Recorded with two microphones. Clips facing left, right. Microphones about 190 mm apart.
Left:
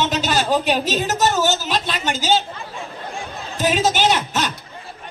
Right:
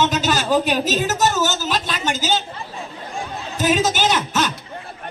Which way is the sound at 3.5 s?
45° right (ahead or behind).